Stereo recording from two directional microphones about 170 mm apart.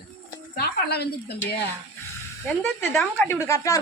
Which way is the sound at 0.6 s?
70° left (ahead or behind).